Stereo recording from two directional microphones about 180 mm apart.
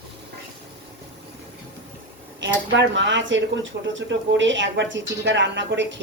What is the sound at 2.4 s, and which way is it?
Speech, 85° right.